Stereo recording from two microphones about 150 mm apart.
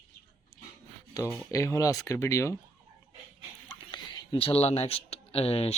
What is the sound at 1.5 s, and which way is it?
Speech, 20° left (ahead or behind).